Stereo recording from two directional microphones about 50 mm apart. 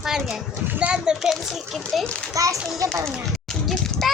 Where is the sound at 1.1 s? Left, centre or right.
Centre.